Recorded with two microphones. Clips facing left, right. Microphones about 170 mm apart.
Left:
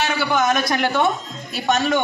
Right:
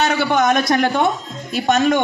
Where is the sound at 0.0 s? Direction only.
35° right (ahead or behind).